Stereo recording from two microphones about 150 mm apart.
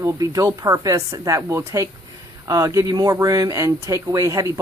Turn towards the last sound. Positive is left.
turn(degrees=-20)  # may be behind; listen again after turning